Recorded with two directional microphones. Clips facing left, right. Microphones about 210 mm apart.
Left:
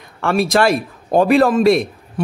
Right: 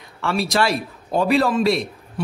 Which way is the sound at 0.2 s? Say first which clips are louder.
Left 5 dB; 50° left (ahead or behind).